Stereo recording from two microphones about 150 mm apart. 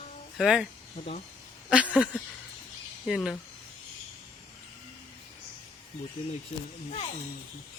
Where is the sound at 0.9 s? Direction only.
45° left (ahead or behind).